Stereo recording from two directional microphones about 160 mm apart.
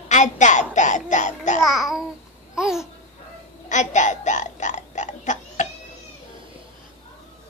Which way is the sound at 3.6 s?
50° left (ahead or behind).